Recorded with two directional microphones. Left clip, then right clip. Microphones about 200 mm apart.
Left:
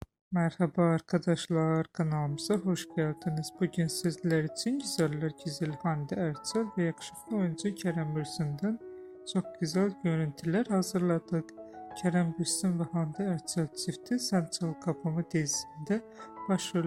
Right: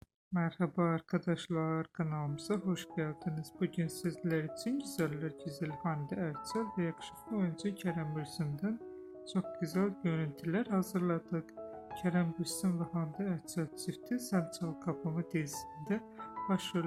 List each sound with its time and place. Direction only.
0.3 s speech: 25° left (ahead or behind)